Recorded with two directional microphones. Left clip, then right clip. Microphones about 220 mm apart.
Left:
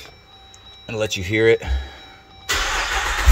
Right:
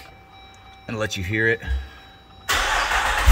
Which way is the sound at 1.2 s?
10° left (ahead or behind).